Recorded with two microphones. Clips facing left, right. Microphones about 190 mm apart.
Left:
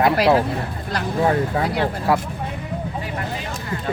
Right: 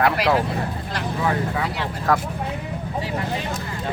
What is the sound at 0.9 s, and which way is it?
Speech, 40° left (ahead or behind).